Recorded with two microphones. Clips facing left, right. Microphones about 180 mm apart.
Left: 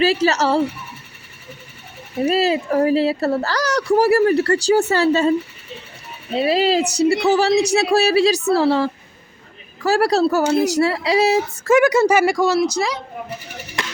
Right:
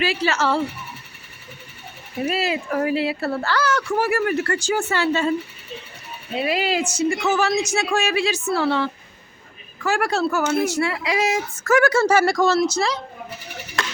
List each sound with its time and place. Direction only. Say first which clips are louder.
0.0 s speech: left 5 dB; 40° left (ahead or behind)
2.2 s speech: left 6 dB; 35° left (ahead or behind)
6.3 s speech: left 5 dB; 35° left (ahead or behind); by 13.0 s 15° left (ahead or behind)